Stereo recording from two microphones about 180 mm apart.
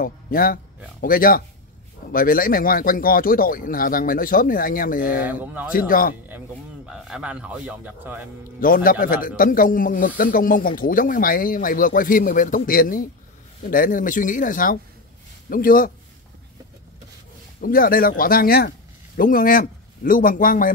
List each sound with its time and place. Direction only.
0.0 s speech: 55° left (ahead or behind)
5.2 s speech: 10° right (ahead or behind)
5.7 s speech: 50° left (ahead or behind)
6.9 s speech: 5° right (ahead or behind)
8.5 s speech: 50° left (ahead or behind)
17.6 s speech: 55° left (ahead or behind)